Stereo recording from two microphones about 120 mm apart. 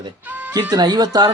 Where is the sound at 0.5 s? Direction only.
35° right (ahead or behind).